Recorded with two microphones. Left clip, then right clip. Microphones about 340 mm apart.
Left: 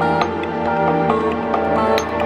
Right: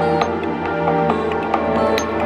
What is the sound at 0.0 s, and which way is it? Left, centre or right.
Music, centre.